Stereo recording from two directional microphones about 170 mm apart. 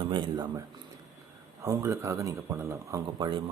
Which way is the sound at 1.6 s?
20° right (ahead or behind).